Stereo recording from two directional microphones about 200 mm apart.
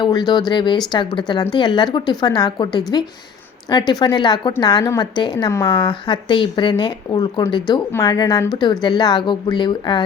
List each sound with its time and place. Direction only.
0.0 s speech: 20° left (ahead or behind)